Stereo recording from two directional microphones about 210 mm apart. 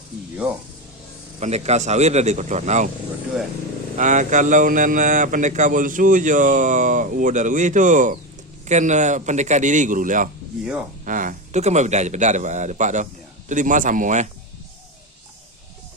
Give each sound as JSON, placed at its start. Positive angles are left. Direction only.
{"t": 1.4, "sound": "a man's voice", "side_deg": -30}
{"t": 3.9, "sound": "a man's voice", "side_deg": -35}